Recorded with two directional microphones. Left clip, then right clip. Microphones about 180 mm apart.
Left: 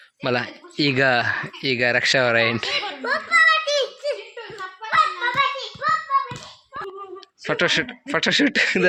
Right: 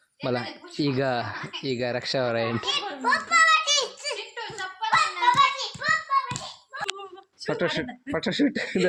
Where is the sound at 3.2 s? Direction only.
60° right (ahead or behind).